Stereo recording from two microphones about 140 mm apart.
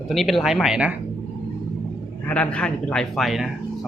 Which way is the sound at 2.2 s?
10° left (ahead or behind).